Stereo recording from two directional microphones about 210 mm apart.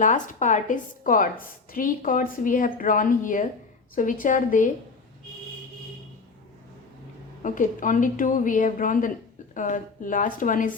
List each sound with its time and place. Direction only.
0.0 s a woman's voice: 35° left (ahead or behind)
7.4 s a woman's voice: 40° left (ahead or behind)